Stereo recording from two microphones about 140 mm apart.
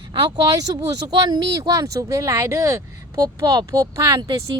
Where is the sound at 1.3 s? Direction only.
30° right (ahead or behind).